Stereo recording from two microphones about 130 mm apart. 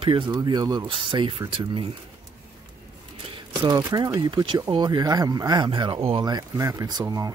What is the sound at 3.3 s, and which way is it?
Speech, 30° right (ahead or behind).